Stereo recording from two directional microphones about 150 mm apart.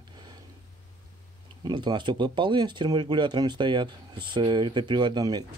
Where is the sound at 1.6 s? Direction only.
30° right (ahead or behind).